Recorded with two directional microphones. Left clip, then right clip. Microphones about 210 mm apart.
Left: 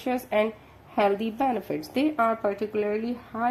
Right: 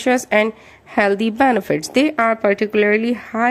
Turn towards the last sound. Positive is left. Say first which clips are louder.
# right 11 dB
turn(degrees=-40)  # may be behind; listen again after turning